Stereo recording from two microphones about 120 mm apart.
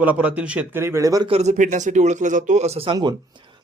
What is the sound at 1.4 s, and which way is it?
A man's voice, 85° right.